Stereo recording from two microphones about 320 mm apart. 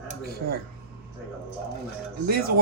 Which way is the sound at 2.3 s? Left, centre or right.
Right.